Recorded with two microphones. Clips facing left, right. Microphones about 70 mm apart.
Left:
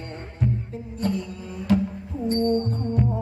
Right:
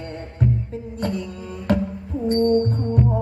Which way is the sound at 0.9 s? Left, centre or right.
Right.